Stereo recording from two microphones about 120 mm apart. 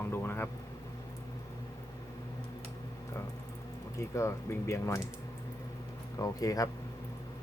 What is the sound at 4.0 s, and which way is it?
Speech, 25° left (ahead or behind).